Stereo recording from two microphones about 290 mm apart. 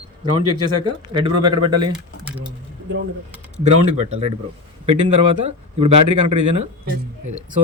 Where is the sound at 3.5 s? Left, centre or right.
Right.